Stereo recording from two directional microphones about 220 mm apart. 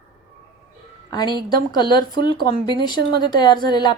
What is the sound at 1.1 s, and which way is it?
Speech, 20° left (ahead or behind).